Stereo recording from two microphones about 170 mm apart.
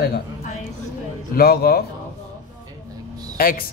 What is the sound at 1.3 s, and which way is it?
Speech, 65° left (ahead or behind).